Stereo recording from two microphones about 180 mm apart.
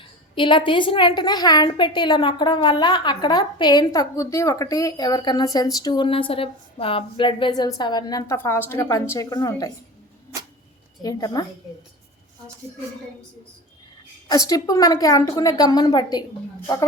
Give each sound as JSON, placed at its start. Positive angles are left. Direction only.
{"t": 0.0, "sound": "a woman's voice", "side_deg": 25}
{"t": 8.4, "sound": "a woman's voice", "side_deg": 10}
{"t": 11.0, "sound": "a woman's voice", "side_deg": 20}
{"t": 14.3, "sound": "a woman's voice", "side_deg": 20}